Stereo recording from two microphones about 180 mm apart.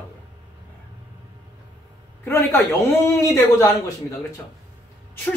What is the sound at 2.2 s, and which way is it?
Speech, 15° left (ahead or behind).